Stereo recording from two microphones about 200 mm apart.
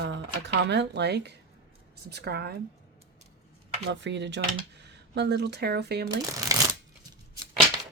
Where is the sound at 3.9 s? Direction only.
60° right (ahead or behind).